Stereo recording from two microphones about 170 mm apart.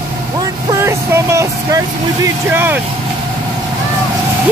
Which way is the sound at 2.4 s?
10° right (ahead or behind).